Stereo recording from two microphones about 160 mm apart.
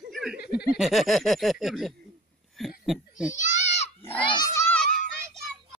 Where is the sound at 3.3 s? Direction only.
50° left (ahead or behind).